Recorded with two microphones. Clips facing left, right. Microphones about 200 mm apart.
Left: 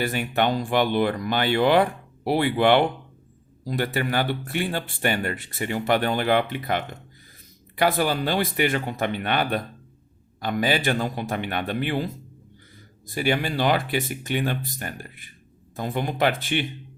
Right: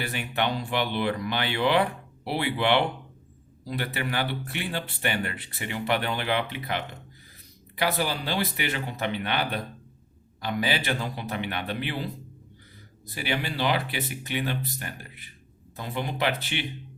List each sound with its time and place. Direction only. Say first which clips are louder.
0.0 s speech: left 5 dB; 45° left (ahead or behind)
13.1 s speech: left 6 dB; 45° left (ahead or behind)